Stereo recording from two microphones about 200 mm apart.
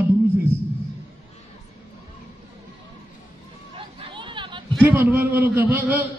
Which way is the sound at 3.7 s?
25° right (ahead or behind).